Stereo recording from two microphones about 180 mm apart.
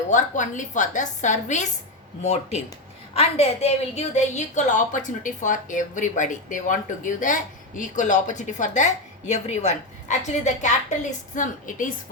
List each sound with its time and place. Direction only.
0.1 s a woman's voice: 45° left (ahead or behind)